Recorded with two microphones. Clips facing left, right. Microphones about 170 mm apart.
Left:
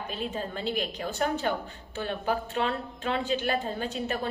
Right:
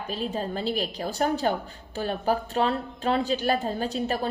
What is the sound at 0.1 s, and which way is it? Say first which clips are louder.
A woman's voice: right 5 dB; 35° right (ahead or behind).